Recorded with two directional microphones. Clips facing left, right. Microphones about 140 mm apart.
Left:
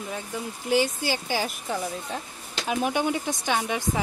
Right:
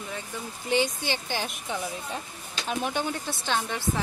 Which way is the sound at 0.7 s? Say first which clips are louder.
Left 2 dB; 5° left (ahead or behind).